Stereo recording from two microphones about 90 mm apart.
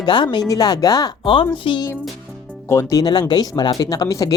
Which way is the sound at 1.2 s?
80° left.